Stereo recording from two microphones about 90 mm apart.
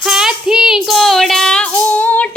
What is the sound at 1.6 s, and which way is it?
Female singing, 15° left (ahead or behind).